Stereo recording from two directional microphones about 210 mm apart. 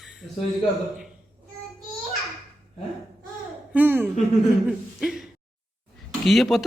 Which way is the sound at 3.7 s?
10° right (ahead or behind).